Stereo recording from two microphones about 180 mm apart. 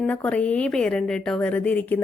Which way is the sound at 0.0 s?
5° left (ahead or behind).